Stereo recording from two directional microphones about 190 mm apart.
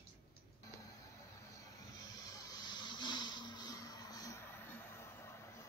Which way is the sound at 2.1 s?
20° left (ahead or behind).